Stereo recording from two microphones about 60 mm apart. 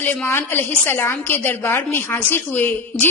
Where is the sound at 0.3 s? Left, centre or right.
Left.